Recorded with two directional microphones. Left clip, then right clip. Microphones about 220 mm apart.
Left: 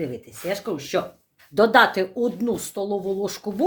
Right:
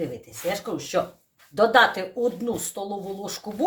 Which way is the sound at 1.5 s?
45° left (ahead or behind).